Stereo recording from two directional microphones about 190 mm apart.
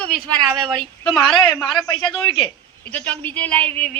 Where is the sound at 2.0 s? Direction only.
25° left (ahead or behind).